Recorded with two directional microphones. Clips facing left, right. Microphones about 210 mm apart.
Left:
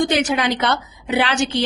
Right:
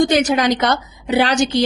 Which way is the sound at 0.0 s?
40° right (ahead or behind).